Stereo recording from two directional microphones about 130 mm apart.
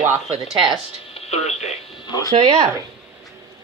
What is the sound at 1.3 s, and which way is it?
Speech, 55° left (ahead or behind).